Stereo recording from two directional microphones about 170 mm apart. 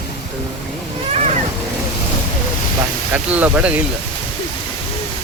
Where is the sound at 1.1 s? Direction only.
40° right (ahead or behind).